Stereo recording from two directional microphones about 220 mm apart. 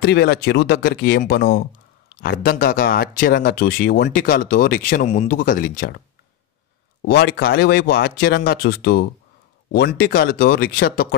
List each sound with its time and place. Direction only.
0.0 s speech: 50° left (ahead or behind)